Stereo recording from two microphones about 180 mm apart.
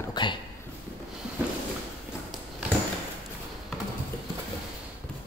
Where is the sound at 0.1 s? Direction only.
25° left (ahead or behind).